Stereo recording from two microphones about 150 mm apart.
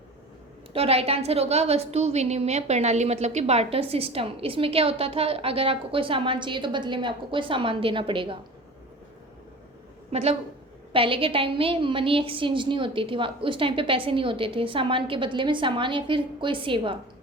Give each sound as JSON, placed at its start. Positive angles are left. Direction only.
{"t": 0.7, "sound": "a woman's voice", "side_deg": -40}
{"t": 10.1, "sound": "a woman's voice", "side_deg": -45}